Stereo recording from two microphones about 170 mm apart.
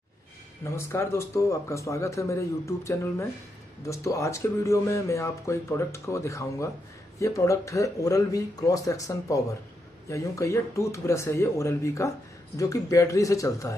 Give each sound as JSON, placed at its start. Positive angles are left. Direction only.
{"t": 0.7, "sound": "speech", "side_deg": 15}